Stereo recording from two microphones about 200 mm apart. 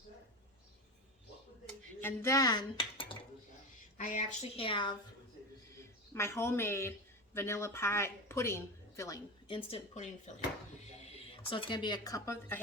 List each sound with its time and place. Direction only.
2.0 s dishes: 10° left (ahead or behind)
3.9 s a woman's voice: 40° left (ahead or behind)
6.1 s a woman's voice: 15° left (ahead or behind)